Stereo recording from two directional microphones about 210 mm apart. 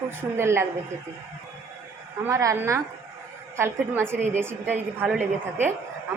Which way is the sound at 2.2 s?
15° right (ahead or behind).